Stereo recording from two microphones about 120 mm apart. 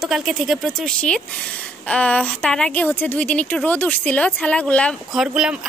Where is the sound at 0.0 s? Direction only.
Centre (ahead or behind).